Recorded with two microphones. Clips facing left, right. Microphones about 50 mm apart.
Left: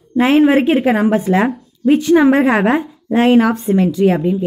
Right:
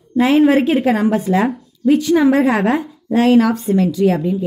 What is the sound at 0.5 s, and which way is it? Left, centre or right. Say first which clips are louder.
A woman's voice: left 1 dB; left.